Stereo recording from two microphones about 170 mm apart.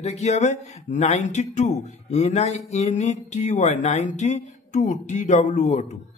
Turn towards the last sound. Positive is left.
turn(degrees=45)  # may be behind; listen again after turning